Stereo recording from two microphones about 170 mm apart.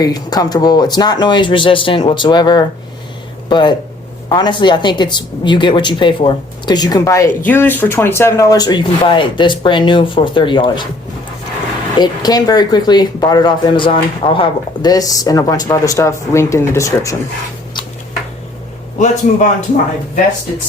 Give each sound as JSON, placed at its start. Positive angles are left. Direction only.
{"t": 0.0, "sound": "speech", "side_deg": 25}
{"t": 11.9, "sound": "speech", "side_deg": 25}
{"t": 18.9, "sound": "speech", "side_deg": 45}